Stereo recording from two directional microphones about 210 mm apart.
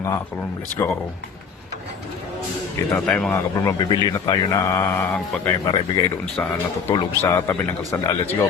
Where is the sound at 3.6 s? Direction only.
20° left (ahead or behind).